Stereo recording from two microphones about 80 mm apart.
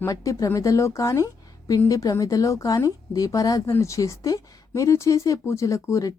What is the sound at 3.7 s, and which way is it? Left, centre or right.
Speech, left.